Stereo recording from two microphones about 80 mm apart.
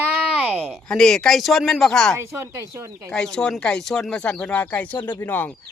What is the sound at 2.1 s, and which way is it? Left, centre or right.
Speech, right.